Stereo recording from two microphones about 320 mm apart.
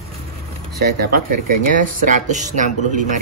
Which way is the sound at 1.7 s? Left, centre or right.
Right.